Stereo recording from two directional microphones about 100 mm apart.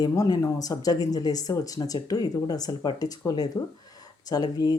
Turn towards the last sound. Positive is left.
turn(degrees=40)  # may be behind; listen again after turning